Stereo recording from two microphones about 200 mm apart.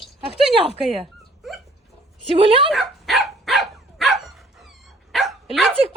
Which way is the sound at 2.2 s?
25° right (ahead or behind).